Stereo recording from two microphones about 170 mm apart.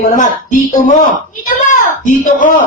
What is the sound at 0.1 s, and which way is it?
Speech, 45° left (ahead or behind).